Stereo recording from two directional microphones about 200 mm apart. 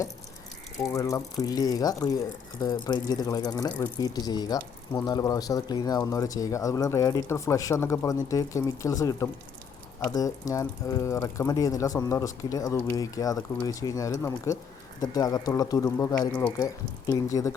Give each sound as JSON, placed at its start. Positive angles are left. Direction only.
{"t": 0.8, "sound": "speech", "side_deg": 15}